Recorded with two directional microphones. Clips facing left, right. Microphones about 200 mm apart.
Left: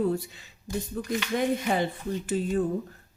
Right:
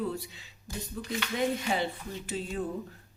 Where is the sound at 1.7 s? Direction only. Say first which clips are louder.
Left 4 dB; 50° left (ahead or behind).